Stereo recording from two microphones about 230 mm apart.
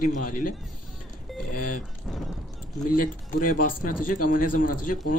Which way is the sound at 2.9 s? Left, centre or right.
Left.